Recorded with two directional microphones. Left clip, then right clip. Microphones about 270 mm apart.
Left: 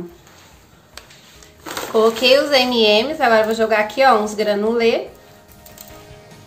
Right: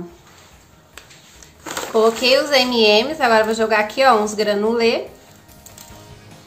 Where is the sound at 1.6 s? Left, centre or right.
Centre.